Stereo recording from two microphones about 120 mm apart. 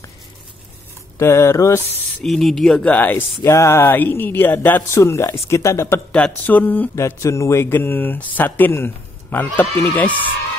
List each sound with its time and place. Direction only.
1.1 s speech: 25° left (ahead or behind)
2.2 s speech: centre (ahead or behind); by 5.9 s 25° left (ahead or behind)
6.1 s speech: 10° left (ahead or behind)